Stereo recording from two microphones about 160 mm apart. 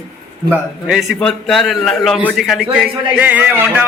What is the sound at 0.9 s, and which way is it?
A man's voice, centre (ahead or behind).